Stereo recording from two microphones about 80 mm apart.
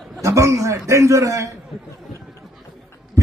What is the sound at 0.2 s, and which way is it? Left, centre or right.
A man's voice, right.